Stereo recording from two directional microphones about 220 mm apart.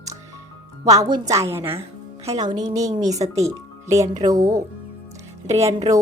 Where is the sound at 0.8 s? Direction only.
15° right (ahead or behind).